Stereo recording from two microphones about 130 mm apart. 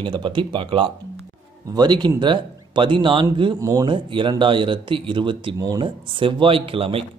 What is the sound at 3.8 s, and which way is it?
Speech, 40° right (ahead or behind).